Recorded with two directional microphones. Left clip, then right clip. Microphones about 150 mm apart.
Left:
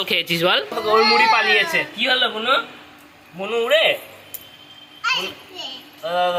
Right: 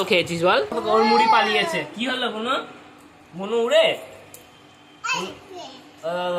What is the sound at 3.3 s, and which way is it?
Speech, 20° left (ahead or behind).